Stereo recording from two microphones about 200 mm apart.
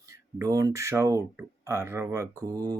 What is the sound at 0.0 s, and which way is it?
Speech, 15° right (ahead or behind).